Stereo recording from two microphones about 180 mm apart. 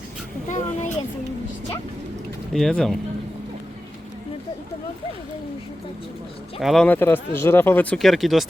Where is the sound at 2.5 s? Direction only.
Centre (ahead or behind).